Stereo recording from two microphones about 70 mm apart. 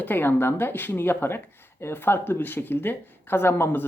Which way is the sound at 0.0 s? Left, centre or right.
Left.